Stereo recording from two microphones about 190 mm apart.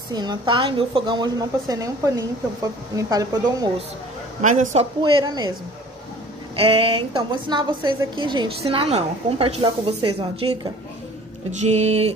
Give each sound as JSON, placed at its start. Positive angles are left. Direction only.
{"t": 0.1, "sound": "a woman's voice", "side_deg": -20}
{"t": 4.4, "sound": "a man's voice", "side_deg": -40}
{"t": 5.0, "sound": "a woman's voice", "side_deg": -25}
{"t": 6.5, "sound": "a woman's voice", "side_deg": -30}
{"t": 11.6, "sound": "a man's voice", "side_deg": -35}